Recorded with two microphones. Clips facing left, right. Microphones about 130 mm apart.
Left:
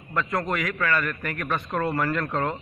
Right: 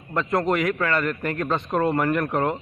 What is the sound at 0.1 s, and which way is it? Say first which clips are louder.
A man's voice: right 4 dB; 25° right (ahead or behind).